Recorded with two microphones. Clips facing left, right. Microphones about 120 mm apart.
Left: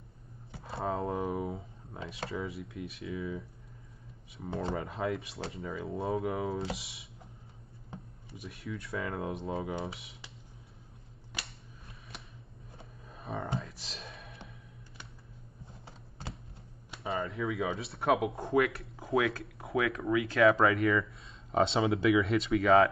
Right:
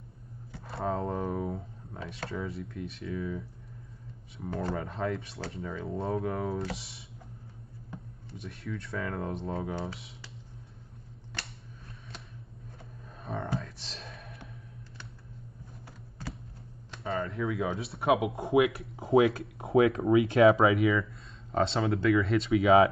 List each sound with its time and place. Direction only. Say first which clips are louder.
0.7 s a sound: right 1 dB; centre (ahead or behind)
2.2 s speech: right 1 dB; centre (ahead or behind)
8.4 s speech: right 2 dB; centre (ahead or behind)
13.2 s a sound: right 2 dB; 5° left (ahead or behind)
16.9 s speech: right 2 dB; 5° left (ahead or behind)
18.9 s speech: right 7 dB; 25° right (ahead or behind)
20.5 s speech: right 2 dB; 5° right (ahead or behind)